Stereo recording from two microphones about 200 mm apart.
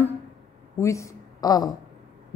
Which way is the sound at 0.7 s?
15° left (ahead or behind).